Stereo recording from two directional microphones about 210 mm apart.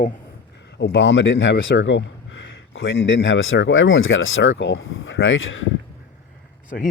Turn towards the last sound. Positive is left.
turn(degrees=65)  # may be behind; listen again after turning